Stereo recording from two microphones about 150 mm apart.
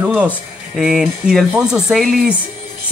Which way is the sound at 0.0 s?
10° right (ahead or behind).